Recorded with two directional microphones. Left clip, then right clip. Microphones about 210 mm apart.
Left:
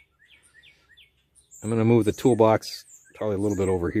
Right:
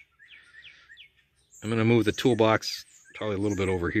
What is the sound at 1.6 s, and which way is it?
Speech, 5° left (ahead or behind).